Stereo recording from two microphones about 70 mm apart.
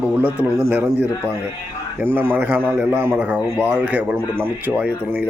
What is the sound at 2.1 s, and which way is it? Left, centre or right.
Speech, right.